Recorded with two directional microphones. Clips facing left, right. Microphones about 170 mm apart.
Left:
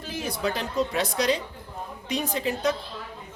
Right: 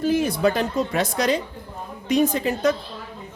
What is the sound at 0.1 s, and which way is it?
Speech, 50° right (ahead or behind).